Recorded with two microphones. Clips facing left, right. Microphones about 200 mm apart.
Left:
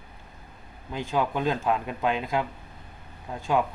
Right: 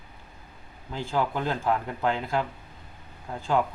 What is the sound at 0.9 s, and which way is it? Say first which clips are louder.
Speech: left 1 dB; 15° left (ahead or behind).